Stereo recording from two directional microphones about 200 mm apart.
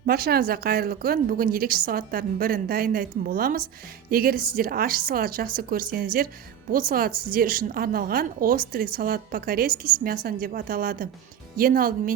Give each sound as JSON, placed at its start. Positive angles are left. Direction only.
{"t": 0.0, "sound": "a woman's voice", "side_deg": -50}